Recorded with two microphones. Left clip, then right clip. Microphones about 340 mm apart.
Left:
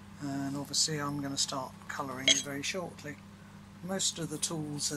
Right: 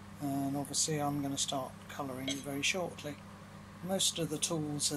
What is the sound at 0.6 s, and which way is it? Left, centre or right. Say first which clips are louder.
Speech: left 3 dB; centre.